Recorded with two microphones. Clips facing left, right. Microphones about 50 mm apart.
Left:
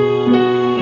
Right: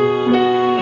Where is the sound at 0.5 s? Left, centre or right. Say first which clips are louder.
Even; centre.